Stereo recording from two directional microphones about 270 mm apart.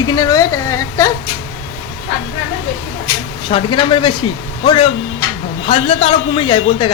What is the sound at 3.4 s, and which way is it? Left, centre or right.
A woman's voice, centre.